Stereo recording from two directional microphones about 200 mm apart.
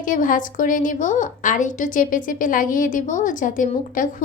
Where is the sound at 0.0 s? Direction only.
40° left (ahead or behind).